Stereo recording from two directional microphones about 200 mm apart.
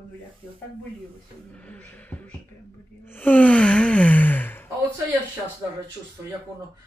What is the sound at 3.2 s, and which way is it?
Gasp, 10° left (ahead or behind).